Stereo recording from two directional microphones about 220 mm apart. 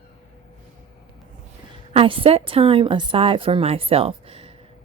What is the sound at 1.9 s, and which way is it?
A woman's voice, 25° right (ahead or behind).